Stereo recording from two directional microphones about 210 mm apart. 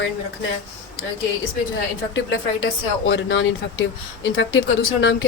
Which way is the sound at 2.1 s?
65° left (ahead or behind).